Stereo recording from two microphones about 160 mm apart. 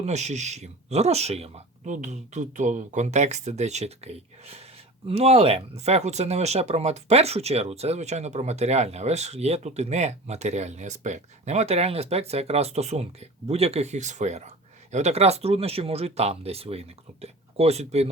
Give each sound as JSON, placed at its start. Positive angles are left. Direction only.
{"t": 0.0, "sound": "speech", "side_deg": -45}